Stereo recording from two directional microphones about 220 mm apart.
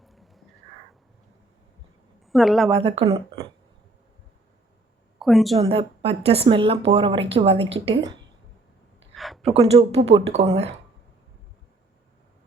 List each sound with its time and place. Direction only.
0.0 s a sound: centre (ahead or behind)
2.3 s a woman's voice: centre (ahead or behind)
2.6 s speech: 25° right (ahead or behind)
5.2 s a woman's voice: centre (ahead or behind)
5.5 s speech: 25° right (ahead or behind)
9.1 s a sound: centre (ahead or behind)
9.5 s speech: 25° right (ahead or behind)